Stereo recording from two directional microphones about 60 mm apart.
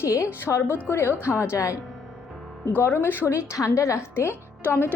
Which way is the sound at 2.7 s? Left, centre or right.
Left.